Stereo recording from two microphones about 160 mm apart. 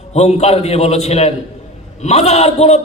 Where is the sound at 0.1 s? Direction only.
40° left (ahead or behind).